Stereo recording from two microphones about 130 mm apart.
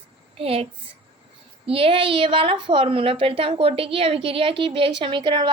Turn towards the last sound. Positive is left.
turn(degrees=-40)  # may be behind; listen again after turning